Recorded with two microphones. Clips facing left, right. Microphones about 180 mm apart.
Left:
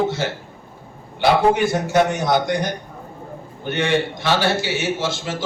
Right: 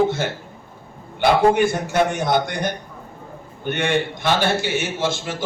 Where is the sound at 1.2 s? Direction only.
50° right (ahead or behind).